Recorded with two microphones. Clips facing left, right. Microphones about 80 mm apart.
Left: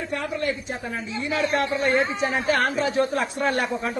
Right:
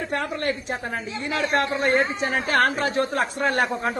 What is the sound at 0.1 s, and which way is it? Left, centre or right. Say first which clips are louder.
A man's voice: even; right.